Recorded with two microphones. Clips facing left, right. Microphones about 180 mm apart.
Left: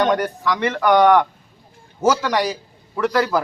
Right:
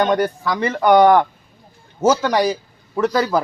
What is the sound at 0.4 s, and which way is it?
Speech, 30° right (ahead or behind).